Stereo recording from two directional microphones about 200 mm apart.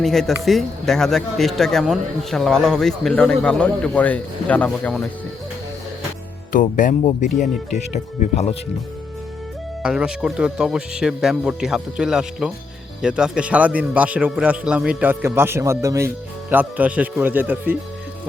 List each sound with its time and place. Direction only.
0.0 s speech: centre (ahead or behind)
6.5 s speech: 40° left (ahead or behind)
9.8 s a man's voice: 5° right (ahead or behind)